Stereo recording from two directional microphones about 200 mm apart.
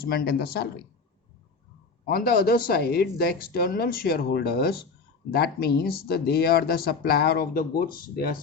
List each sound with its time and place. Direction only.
0.0 s speech: 50° left (ahead or behind)
2.0 s speech: 50° left (ahead or behind)